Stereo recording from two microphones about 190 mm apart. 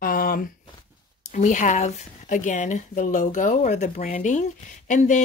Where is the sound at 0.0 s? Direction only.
50° left (ahead or behind).